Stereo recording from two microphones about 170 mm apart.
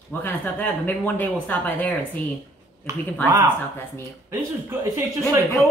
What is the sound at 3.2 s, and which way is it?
Speech, 20° right (ahead or behind).